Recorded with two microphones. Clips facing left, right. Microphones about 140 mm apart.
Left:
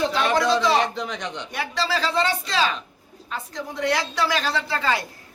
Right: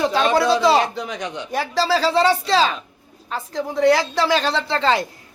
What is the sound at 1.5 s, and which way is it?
Speech, 35° right (ahead or behind).